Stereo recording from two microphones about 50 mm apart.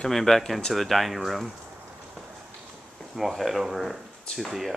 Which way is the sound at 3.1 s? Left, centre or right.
Centre.